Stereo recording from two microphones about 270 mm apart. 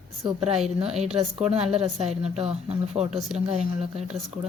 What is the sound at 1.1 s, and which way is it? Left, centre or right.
Speech, right.